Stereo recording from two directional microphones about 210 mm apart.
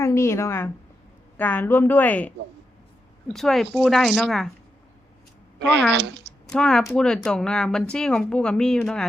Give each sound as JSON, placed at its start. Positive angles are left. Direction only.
{"t": 0.0, "sound": "speech", "side_deg": 15}
{"t": 5.9, "sound": "speech", "side_deg": -55}
{"t": 6.5, "sound": "speech", "side_deg": 5}